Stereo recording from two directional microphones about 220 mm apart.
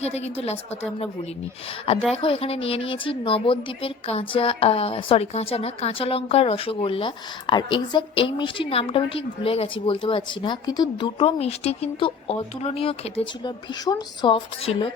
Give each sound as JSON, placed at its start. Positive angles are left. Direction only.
{"t": 0.0, "sound": "a woman's voice", "side_deg": 30}
{"t": 1.9, "sound": "a woman's voice", "side_deg": 25}